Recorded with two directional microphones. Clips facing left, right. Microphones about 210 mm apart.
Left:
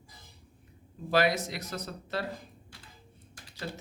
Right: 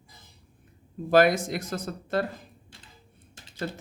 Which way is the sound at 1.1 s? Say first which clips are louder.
Right 6 dB; 50° right (ahead or behind).